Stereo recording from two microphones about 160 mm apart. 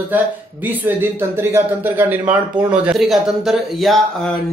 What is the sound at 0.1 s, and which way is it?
Speech, 10° right (ahead or behind).